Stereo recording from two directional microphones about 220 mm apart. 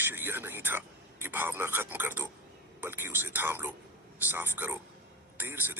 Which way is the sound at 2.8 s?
10° right (ahead or behind).